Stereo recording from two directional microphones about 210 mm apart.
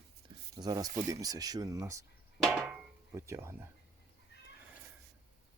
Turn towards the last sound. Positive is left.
turn(degrees=-10)  # may be behind; listen again after turning